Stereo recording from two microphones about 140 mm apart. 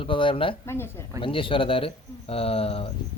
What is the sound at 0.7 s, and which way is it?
Speech, 15° left (ahead or behind).